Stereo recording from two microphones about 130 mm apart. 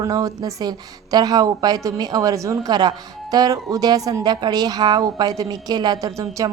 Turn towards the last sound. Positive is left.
turn(degrees=-25)  # may be behind; listen again after turning